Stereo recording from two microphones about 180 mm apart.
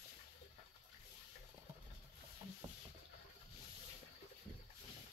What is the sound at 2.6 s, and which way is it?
Boat, 20° right (ahead or behind).